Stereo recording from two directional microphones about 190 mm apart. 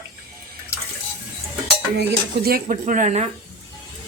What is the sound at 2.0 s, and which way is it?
Speech, 50° right (ahead or behind).